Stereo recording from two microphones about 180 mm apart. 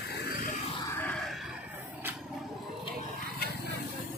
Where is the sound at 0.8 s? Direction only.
10° left (ahead or behind).